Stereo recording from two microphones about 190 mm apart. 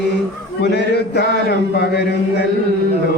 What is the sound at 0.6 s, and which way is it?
Mantra, 65° left (ahead or behind).